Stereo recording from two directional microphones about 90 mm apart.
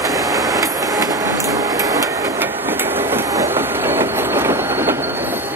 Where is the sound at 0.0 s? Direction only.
40° right (ahead or behind).